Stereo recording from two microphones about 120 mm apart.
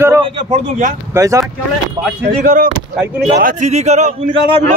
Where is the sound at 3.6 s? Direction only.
70° right (ahead or behind).